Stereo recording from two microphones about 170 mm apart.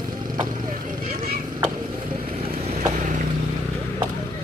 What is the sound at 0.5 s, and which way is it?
Vehicle, 50° right (ahead or behind).